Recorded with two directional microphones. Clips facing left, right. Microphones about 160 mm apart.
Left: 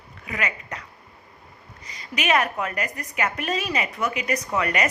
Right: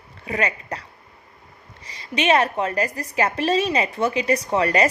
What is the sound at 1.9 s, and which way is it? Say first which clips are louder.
A woman's voice: right 4 dB; 30° right (ahead or behind).